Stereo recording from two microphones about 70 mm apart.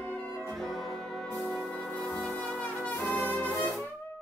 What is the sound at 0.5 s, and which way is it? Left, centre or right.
Music, centre.